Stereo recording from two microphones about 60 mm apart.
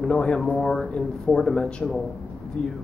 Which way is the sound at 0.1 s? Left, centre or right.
Centre.